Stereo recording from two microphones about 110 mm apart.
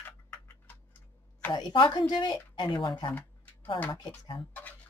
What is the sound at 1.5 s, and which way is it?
Speech, 40° left (ahead or behind).